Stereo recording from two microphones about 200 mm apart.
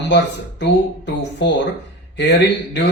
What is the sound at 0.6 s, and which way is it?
Speech, 60° left (ahead or behind).